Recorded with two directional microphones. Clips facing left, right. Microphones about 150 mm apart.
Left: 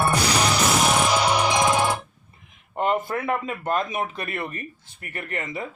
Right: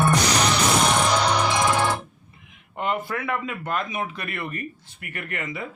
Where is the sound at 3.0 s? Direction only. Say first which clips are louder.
Left 2 dB; 25° left (ahead or behind).